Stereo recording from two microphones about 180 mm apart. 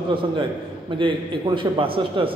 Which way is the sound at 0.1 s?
30° right (ahead or behind).